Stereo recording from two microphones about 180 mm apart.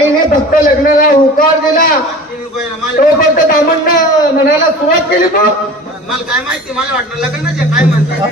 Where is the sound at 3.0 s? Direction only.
50° left (ahead or behind).